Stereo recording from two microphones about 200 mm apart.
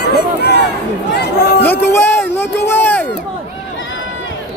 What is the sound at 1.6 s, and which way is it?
Music, 10° left (ahead or behind).